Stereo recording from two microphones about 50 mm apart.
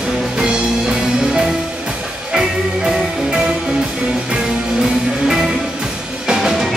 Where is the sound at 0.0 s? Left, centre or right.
Centre.